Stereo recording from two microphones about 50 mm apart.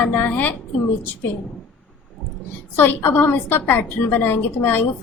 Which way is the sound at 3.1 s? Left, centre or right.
Left.